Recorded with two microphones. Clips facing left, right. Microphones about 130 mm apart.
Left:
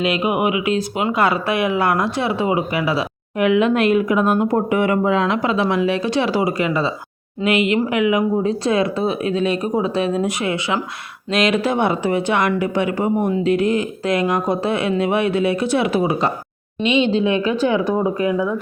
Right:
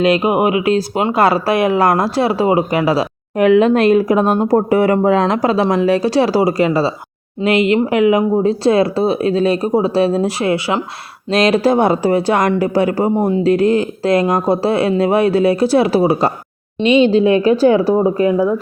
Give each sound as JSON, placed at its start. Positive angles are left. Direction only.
{"t": 0.0, "sound": "speech", "side_deg": -40}